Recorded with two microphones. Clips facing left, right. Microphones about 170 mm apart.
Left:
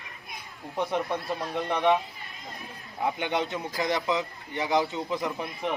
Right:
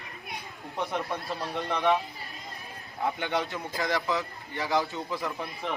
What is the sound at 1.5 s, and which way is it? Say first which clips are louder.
Speech: left 2 dB; 20° left (ahead or behind).